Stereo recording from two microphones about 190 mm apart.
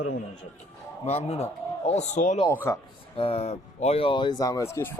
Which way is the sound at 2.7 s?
15° left (ahead or behind).